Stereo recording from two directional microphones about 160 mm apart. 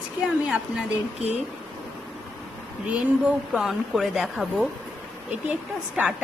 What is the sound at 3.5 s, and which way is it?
Speech, centre (ahead or behind).